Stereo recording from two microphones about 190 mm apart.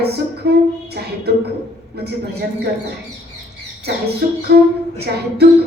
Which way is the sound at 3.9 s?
60° right (ahead or behind).